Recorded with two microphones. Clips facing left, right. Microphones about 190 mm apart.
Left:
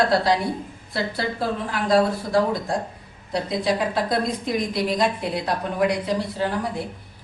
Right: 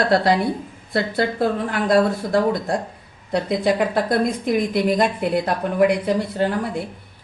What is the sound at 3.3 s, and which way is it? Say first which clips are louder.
A woman's voice: right 4 dB; 60° right (ahead or behind).